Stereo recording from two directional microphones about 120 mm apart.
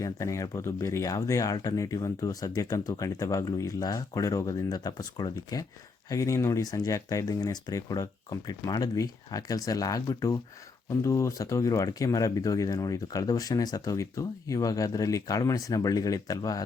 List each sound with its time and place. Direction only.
0.0 s speech: 25° left (ahead or behind)